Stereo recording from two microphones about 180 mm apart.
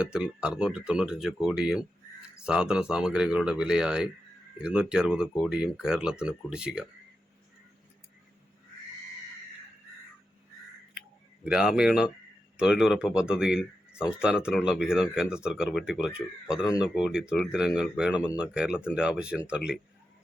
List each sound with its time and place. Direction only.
0.0 s speech: 5° right (ahead or behind)
11.4 s speech: 5° right (ahead or behind)